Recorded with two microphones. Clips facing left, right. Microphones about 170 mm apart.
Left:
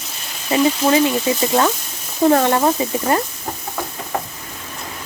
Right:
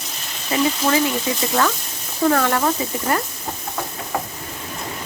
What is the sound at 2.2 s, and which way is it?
Speech, 25° left (ahead or behind).